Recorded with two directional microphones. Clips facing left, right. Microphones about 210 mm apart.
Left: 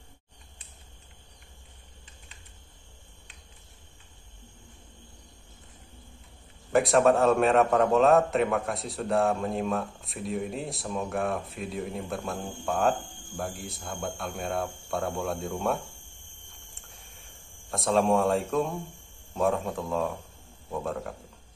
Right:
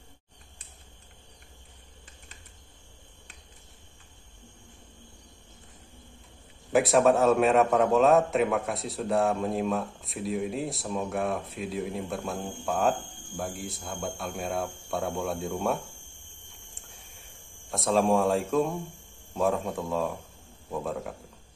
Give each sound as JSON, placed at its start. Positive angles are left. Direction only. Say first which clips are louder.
{"t": 6.7, "sound": "a man's voice", "louder": "even", "side_deg": 0}
{"t": 16.9, "sound": "a sound", "louder": "even", "side_deg": 0}
{"t": 19.3, "sound": "a man's voice", "louder": "even", "side_deg": 0}